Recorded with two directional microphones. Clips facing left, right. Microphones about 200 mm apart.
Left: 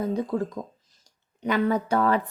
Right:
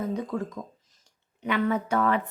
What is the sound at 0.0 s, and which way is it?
Speech, 30° left (ahead or behind).